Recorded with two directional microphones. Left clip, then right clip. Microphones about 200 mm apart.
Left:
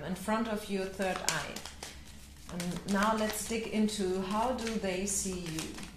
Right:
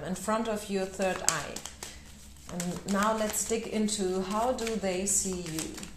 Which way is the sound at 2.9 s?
15° right (ahead or behind).